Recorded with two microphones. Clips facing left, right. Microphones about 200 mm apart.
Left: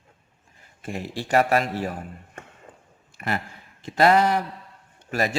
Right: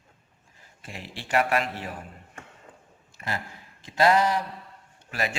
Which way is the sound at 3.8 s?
60° left (ahead or behind).